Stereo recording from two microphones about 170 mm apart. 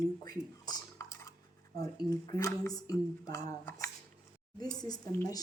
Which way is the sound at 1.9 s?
20° left (ahead or behind).